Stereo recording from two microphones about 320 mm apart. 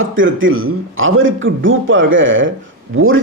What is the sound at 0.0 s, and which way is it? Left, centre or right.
A man's voice, right.